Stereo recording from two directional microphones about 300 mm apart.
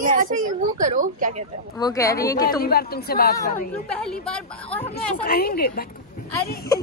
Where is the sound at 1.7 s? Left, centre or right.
Centre.